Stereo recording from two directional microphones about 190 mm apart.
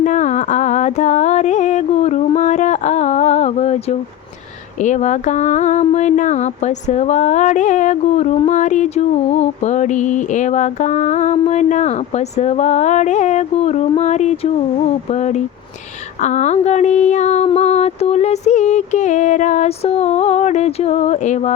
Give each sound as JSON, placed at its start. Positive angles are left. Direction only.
{"t": 0.0, "sound": "carnatic music", "side_deg": 40}
{"t": 4.8, "sound": "mantra", "side_deg": 40}